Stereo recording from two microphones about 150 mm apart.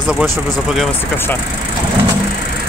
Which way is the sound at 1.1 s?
15° left (ahead or behind).